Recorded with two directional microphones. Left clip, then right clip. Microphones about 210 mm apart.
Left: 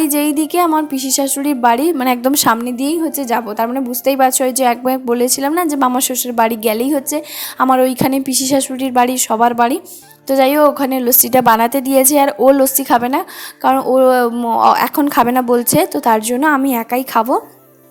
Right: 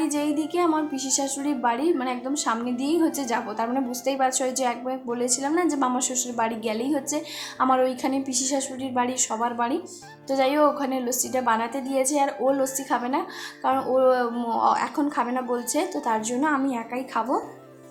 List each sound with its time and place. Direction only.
0.0 s a woman's voice: 40° left (ahead or behind)